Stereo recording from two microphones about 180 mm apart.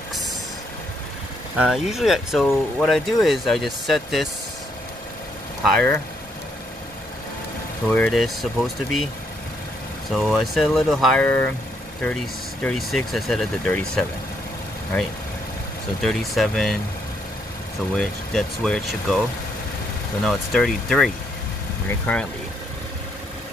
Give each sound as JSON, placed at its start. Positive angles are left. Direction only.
{"t": 1.6, "sound": "speech", "side_deg": -5}
{"t": 5.6, "sound": "speech", "side_deg": 5}
{"t": 7.9, "sound": "speech", "side_deg": 5}
{"t": 10.1, "sound": "speech", "side_deg": 0}
{"t": 12.6, "sound": "speech", "side_deg": 0}
{"t": 16.0, "sound": "speech", "side_deg": 0}
{"t": 17.9, "sound": "speech", "side_deg": 5}